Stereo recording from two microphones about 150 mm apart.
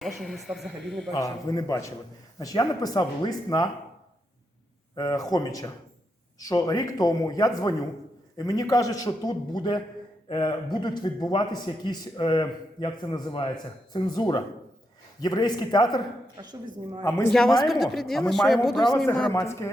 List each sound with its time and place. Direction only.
0.2 s speech: centre (ahead or behind)
1.1 s a man's voice: 25° left (ahead or behind)
4.9 s a man's voice: 25° left (ahead or behind)
16.4 s speech: 30° right (ahead or behind)
17.0 s a man's voice: 15° left (ahead or behind)
17.3 s speech: centre (ahead or behind)
19.5 s a man's voice: 15° left (ahead or behind)